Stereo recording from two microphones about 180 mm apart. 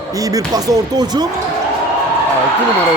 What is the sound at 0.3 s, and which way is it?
Speech, 20° right (ahead or behind).